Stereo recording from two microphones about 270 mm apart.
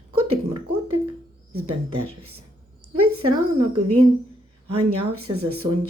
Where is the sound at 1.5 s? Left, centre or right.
Right.